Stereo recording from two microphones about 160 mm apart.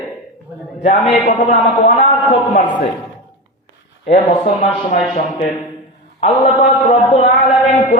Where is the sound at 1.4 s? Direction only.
40° left (ahead or behind).